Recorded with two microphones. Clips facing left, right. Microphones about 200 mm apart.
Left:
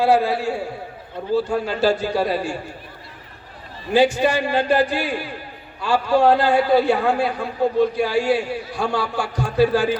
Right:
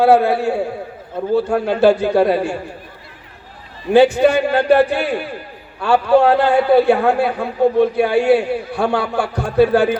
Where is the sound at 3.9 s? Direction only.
60° right (ahead or behind).